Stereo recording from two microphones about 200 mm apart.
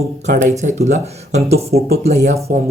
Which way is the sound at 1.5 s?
50° right (ahead or behind).